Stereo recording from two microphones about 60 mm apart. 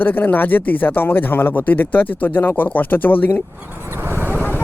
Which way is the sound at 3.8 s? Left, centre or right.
Right.